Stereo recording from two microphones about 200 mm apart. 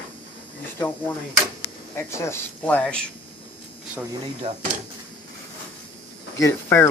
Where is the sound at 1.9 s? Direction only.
10° left (ahead or behind).